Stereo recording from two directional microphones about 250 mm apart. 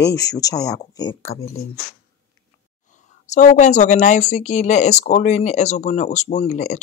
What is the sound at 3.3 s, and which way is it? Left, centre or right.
Speech, left.